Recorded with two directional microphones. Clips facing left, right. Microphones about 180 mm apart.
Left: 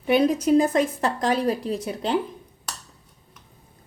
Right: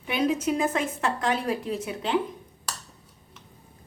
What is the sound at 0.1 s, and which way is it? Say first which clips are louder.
A woman's voice: left 7 dB; 35° left (ahead or behind).